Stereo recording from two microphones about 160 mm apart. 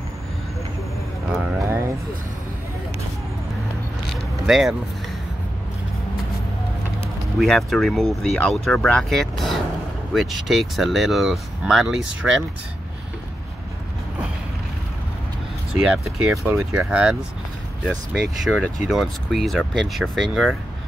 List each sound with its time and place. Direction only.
1.5 s vehicle: 15° right (ahead or behind)
4.1 s vehicle: centre (ahead or behind)
7.3 s speech: centre (ahead or behind)
15.8 s speech: 5° right (ahead or behind)
18.4 s speech: 5° left (ahead or behind)